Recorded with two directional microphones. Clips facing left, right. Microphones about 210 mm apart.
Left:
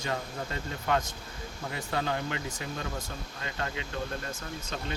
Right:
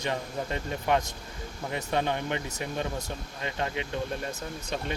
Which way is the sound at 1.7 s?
20° right (ahead or behind).